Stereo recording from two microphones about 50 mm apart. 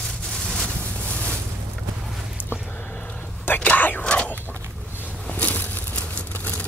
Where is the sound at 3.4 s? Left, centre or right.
Left.